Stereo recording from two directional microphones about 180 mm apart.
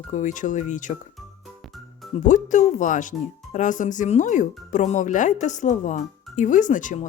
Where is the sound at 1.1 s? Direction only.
Centre (ahead or behind).